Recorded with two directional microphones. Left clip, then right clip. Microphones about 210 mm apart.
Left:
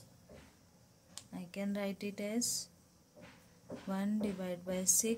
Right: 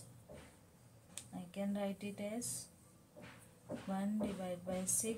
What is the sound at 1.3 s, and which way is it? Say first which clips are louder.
A woman's voice: left 2 dB; 45° left (ahead or behind).